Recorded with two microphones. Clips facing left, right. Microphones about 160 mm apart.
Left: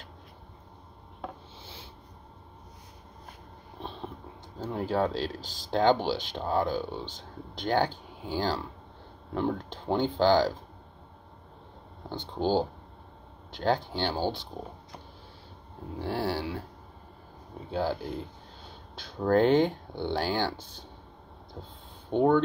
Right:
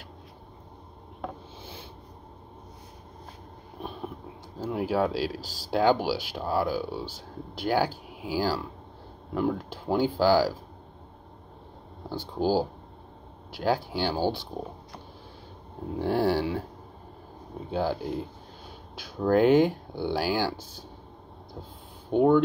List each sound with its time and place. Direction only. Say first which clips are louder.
1.6 s a sound: right 4 dB; 15° right (ahead or behind)
3.8 s a sound: right 3 dB; 10° right (ahead or behind)
4.6 s speech: right 2 dB; 10° right (ahead or behind)
12.1 s speech: right 2 dB; 10° right (ahead or behind)
16.0 s speech: right 6 dB; 15° right (ahead or behind)
17.6 s speech: right 2 dB; 15° right (ahead or behind)
22.1 s speech: right 2 dB; 10° right (ahead or behind)